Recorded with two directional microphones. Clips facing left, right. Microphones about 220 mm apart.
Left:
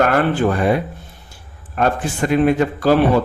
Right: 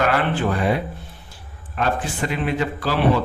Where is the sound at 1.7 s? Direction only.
45° left (ahead or behind).